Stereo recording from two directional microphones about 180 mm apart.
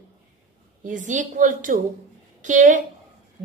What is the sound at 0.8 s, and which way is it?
A woman's voice, 45° right (ahead or behind).